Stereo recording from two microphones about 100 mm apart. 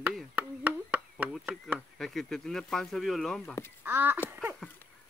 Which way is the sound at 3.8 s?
20° right (ahead or behind).